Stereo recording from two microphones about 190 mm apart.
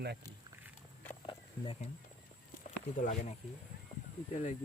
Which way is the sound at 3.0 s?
40° left (ahead or behind).